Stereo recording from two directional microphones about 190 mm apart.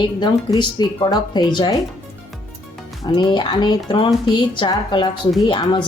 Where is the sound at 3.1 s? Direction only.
25° left (ahead or behind).